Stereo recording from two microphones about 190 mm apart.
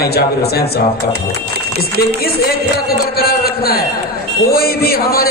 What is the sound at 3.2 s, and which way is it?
A man's voice, 55° left (ahead or behind).